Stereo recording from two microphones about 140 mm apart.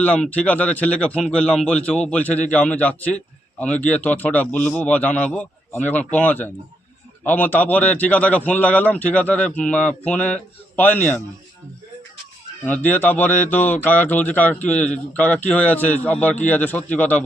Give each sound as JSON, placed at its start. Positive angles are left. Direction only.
{"t": 0.0, "sound": "speech", "side_deg": 10}
{"t": 12.6, "sound": "speech", "side_deg": 10}